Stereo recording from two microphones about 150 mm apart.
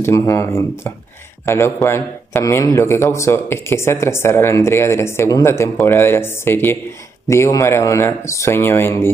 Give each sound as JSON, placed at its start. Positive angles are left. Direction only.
{"t": 0.0, "sound": "a man's voice", "side_deg": 20}